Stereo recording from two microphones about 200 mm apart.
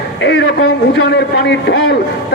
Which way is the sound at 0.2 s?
60° left (ahead or behind).